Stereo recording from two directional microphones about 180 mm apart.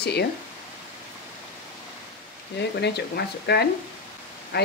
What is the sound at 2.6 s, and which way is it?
Speech, 70° left (ahead or behind).